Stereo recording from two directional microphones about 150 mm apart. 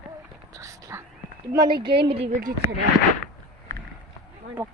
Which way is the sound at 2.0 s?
40° right (ahead or behind).